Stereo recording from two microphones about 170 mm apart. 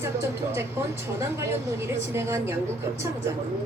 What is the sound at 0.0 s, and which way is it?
A woman's voice, 15° right (ahead or behind).